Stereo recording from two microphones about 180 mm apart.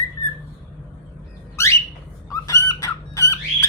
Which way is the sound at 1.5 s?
15° left (ahead or behind).